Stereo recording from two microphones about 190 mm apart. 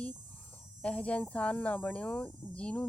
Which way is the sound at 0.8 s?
5° left (ahead or behind).